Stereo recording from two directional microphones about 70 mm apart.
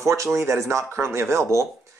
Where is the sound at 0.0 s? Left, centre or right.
Right.